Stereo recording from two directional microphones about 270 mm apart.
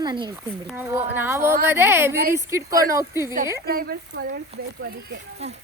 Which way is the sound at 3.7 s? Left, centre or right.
Right.